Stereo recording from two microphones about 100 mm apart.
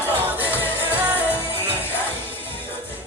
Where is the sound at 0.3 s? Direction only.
15° right (ahead or behind).